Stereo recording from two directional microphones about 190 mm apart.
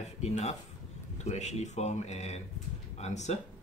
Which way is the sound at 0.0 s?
35° left (ahead or behind).